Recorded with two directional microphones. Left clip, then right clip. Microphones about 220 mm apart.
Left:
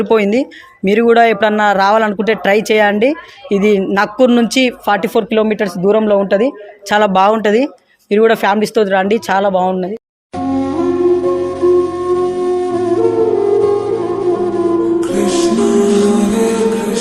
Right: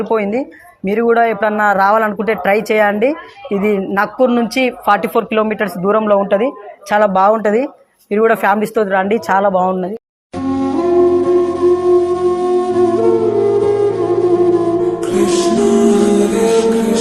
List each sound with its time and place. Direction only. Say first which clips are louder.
0.0 s speech: left 4 dB; 45° left (ahead or behind)
0.9 s speech: left 3 dB; 35° left (ahead or behind)
1.6 s speech: right 1 dB; 25° left (ahead or behind)
4.9 s speech: even; 30° left (ahead or behind)
10.3 s music: left 1 dB; centre (ahead or behind)